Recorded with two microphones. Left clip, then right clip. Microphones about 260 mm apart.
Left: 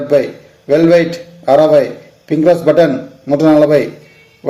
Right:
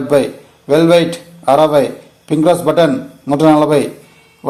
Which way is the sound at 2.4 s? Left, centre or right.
Right.